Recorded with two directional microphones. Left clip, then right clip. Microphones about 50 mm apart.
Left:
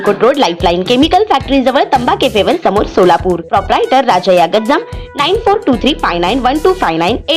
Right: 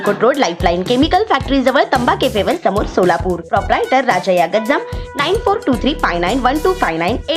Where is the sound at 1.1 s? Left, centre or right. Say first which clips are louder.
Left 4 dB; centre.